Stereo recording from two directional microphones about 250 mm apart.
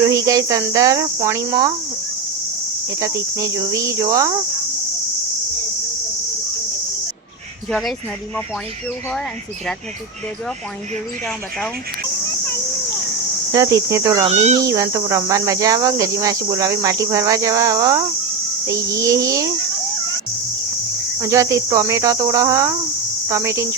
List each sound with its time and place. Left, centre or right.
0.1 s cricket: centre
3.0 s cricket: centre
7.7 s speech: centre
13.5 s cricket: centre
14.3 s speech: right
14.6 s cricket: centre
21.2 s cricket: centre